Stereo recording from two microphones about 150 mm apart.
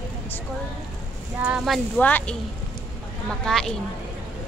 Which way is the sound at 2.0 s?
10° left (ahead or behind).